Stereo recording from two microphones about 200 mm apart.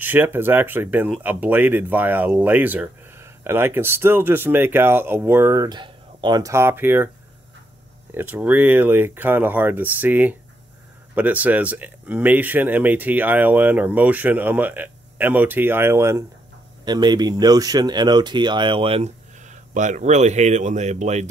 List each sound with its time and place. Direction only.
0.0 s speech: 10° right (ahead or behind)
8.1 s speech: 10° right (ahead or behind); by 21.3 s 35° right (ahead or behind)